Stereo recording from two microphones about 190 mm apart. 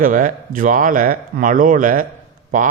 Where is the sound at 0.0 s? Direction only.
45° right (ahead or behind).